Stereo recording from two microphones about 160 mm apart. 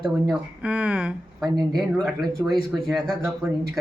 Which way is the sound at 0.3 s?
5° right (ahead or behind).